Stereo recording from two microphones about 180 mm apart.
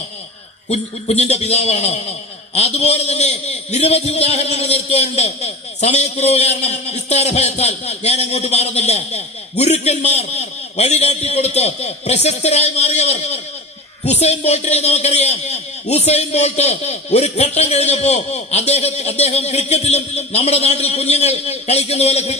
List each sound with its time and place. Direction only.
0.7 s a man's voice: 40° left (ahead or behind)